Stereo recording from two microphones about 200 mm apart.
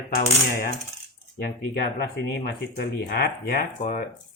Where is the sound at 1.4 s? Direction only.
50° left (ahead or behind).